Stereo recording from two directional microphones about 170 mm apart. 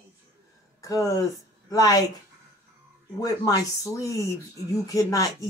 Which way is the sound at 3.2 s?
20° left (ahead or behind).